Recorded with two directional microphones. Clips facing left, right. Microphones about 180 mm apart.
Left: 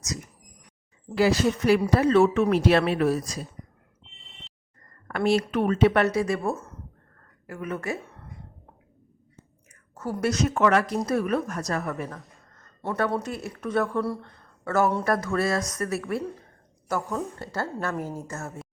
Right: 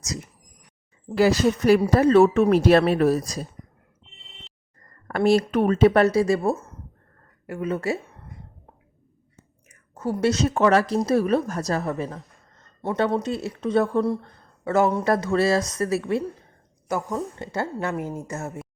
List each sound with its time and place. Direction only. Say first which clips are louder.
1.1 s speech: right 3 dB; 45° right (ahead or behind)
5.0 s speech: right 4 dB; 40° right (ahead or behind)
9.9 s speech: right 4 dB; 25° right (ahead or behind)
12.5 s speech: right 3 dB; 20° right (ahead or behind)
16.9 s speech: right 2 dB; 15° right (ahead or behind)